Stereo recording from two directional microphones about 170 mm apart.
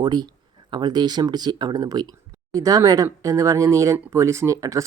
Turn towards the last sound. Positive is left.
turn(degrees=-20)  # may be behind; listen again after turning